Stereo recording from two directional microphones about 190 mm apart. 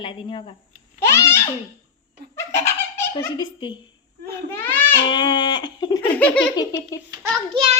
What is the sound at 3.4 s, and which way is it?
Speech, 25° left (ahead or behind).